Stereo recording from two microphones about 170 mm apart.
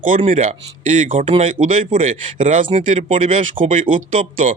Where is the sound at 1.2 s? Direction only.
35° right (ahead or behind).